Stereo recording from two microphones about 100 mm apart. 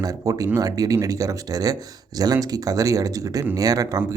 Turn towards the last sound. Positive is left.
turn(degrees=-40)  # may be behind; listen again after turning